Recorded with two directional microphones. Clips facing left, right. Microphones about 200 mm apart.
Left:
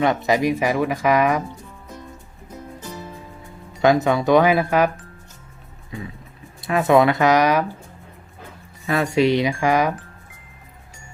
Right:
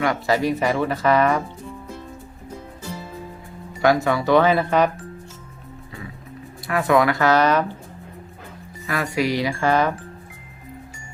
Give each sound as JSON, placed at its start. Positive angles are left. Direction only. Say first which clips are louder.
{"t": 0.0, "sound": "speech", "louder": "left 2 dB", "side_deg": 20}
{"t": 3.8, "sound": "speech", "louder": "left 2 dB", "side_deg": 20}
{"t": 6.7, "sound": "speech", "louder": "left 3 dB", "side_deg": 20}
{"t": 8.9, "sound": "speech", "louder": "left 5 dB", "side_deg": 25}